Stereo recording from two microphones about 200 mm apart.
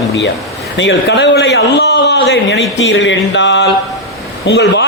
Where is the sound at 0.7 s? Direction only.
65° left (ahead or behind).